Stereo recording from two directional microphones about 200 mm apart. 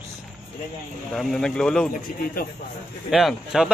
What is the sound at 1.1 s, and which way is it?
Speech, 5° left (ahead or behind).